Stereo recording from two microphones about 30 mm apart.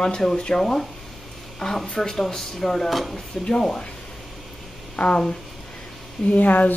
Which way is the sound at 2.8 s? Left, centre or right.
Centre.